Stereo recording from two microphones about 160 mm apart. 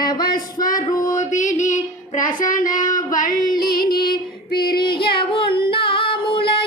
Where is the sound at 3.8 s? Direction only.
70° left (ahead or behind).